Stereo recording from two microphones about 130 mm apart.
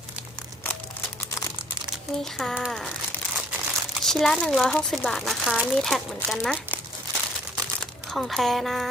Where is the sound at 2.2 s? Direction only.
Centre (ahead or behind).